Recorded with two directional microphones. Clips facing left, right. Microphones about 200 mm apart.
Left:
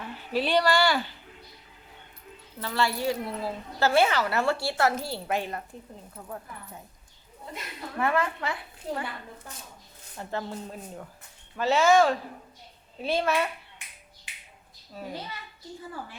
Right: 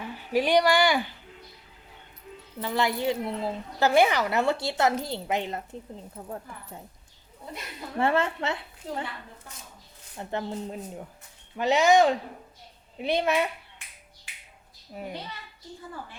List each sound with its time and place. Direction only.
0.0 s a woman's voice: 15° right (ahead or behind)
2.6 s a woman's voice: 15° right (ahead or behind)
7.9 s a woman's voice: 25° right (ahead or behind)
10.2 s a woman's voice: 20° right (ahead or behind)
14.9 s speech: 15° right (ahead or behind)